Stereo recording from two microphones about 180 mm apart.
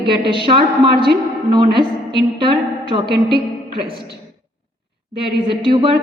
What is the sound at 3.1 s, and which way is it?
Speech, 65° right (ahead or behind).